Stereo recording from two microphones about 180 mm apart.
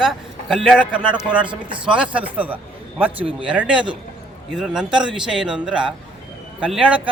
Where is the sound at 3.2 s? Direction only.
30° right (ahead or behind).